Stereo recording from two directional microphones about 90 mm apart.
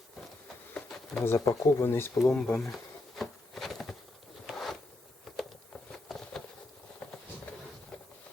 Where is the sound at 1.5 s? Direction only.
30° left (ahead or behind).